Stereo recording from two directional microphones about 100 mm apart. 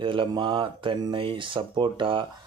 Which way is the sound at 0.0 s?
55° right (ahead or behind).